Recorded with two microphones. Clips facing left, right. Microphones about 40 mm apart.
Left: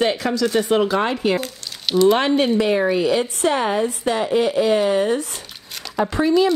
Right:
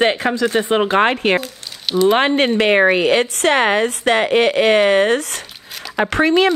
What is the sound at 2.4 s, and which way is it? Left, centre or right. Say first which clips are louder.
A woman's voice: right 4 dB; right.